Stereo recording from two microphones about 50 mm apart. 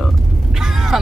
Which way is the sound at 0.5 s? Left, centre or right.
Centre.